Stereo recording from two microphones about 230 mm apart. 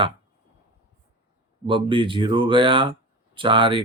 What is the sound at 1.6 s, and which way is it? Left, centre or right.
Speech, right.